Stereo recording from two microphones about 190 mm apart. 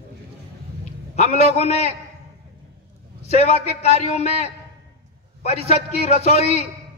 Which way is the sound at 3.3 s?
35° left (ahead or behind).